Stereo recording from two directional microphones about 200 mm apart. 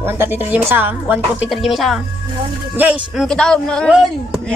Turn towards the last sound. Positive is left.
turn(degrees=0)  # may be behind; listen again after turning